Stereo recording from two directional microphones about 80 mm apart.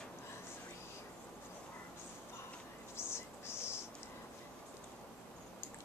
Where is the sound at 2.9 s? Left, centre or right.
Left.